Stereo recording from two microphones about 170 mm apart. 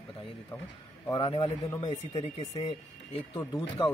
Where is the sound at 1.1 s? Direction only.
30° left (ahead or behind).